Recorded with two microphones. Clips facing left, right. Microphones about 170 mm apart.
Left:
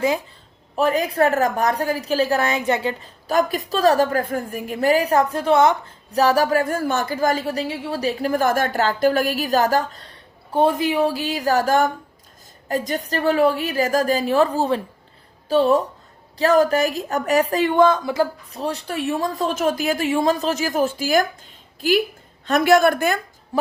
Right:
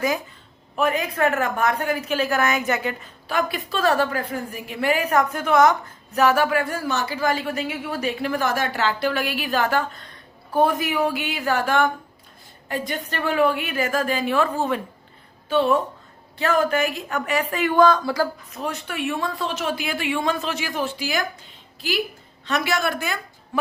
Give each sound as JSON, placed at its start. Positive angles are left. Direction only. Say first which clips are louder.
{"t": 0.8, "sound": "speech", "louder": "left 3 dB", "side_deg": 35}